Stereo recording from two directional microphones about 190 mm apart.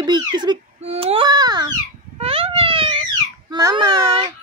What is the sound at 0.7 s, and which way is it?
Baby cry, 30° right (ahead or behind).